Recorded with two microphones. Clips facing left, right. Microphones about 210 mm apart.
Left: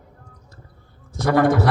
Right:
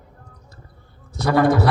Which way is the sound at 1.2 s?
50° left (ahead or behind).